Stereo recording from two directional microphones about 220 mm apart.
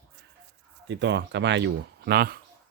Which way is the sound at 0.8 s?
50° right (ahead or behind).